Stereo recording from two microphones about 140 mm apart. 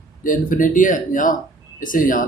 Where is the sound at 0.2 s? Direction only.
70° left (ahead or behind).